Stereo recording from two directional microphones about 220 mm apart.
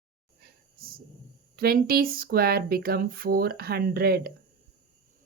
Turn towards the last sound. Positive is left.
turn(degrees=-45)  # may be behind; listen again after turning